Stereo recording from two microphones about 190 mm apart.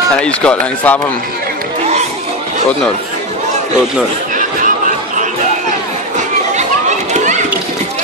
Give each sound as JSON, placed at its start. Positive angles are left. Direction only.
{"t": 0.2, "sound": "speech", "side_deg": 5}
{"t": 4.4, "sound": "chatter", "side_deg": -45}